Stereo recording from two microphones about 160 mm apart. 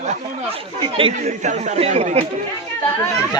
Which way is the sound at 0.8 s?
35° right (ahead or behind).